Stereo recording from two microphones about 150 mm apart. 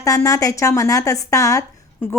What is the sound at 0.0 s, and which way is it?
Speech, 20° left (ahead or behind).